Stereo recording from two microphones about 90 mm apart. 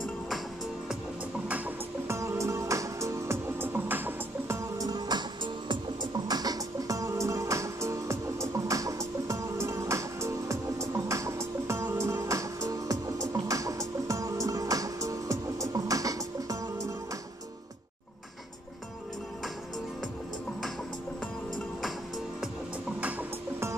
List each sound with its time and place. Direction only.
2.0 s music: 30° right (ahead or behind)
4.7 s music: 45° right (ahead or behind)
22.9 s music: 15° right (ahead or behind)